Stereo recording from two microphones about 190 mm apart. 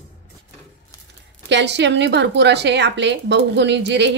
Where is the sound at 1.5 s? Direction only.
65° right (ahead or behind).